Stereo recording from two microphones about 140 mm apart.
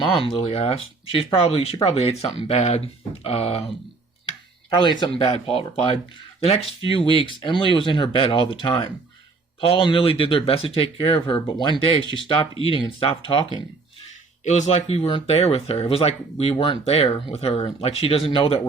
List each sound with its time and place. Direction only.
0.0 s speech: 40° left (ahead or behind)
4.7 s speech: 35° left (ahead or behind)
14.4 s speech: 55° left (ahead or behind); by 18.6 s 40° left (ahead or behind)